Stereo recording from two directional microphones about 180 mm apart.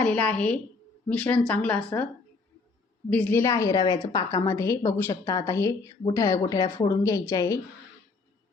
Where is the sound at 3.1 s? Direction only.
10° left (ahead or behind).